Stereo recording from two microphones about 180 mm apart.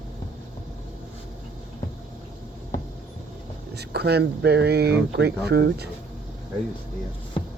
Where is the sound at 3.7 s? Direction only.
65° right (ahead or behind).